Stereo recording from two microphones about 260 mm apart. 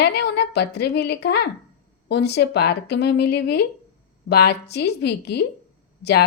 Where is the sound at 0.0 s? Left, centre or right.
Left.